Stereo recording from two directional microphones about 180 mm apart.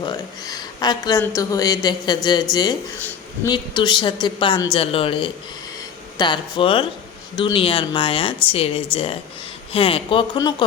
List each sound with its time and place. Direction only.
0.0 s a woman's voice: 20° left (ahead or behind)
3.0 s a sound: 10° left (ahead or behind)
3.5 s a woman's voice: 25° left (ahead or behind)